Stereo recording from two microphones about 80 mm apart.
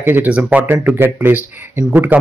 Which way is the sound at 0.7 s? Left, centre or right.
Right.